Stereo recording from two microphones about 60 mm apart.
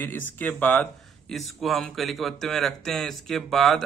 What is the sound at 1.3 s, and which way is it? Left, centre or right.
Speech, centre.